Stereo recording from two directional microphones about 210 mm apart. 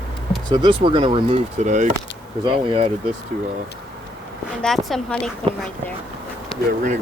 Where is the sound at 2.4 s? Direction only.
25° right (ahead or behind).